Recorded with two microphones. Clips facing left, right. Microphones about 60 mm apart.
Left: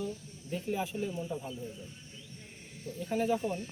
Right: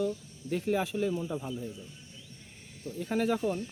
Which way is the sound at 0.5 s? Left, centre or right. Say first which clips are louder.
Right 5 dB; right.